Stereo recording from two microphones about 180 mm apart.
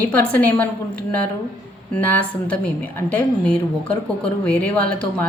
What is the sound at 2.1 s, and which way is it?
A woman's voice, 10° left (ahead or behind).